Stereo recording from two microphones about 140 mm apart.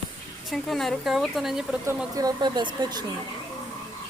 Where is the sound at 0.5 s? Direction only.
Centre (ahead or behind).